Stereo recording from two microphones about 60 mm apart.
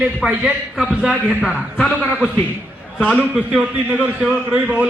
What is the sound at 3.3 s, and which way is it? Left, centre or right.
A man's voice, centre.